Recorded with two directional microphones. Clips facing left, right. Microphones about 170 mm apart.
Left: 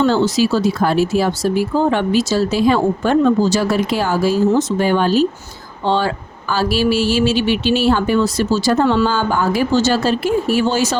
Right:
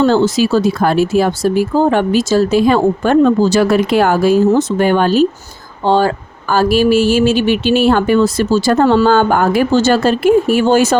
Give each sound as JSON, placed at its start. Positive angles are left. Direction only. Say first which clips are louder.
{"t": 0.0, "sound": "speech", "louder": "right 3 dB", "side_deg": -50}
{"t": 5.8, "sound": "speech", "louder": "right 5 dB", "side_deg": -45}